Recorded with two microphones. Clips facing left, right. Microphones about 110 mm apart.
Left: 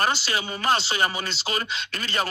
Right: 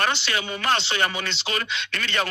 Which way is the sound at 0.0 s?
35° left (ahead or behind).